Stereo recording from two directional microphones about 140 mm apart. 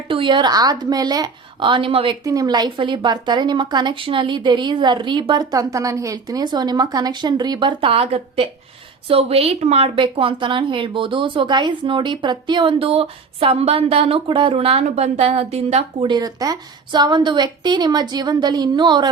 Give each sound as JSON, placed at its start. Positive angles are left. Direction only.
{"t": 0.1, "sound": "a woman's voice", "side_deg": -35}
{"t": 2.2, "sound": "a woman's voice", "side_deg": -25}
{"t": 16.1, "sound": "a woman's voice", "side_deg": -25}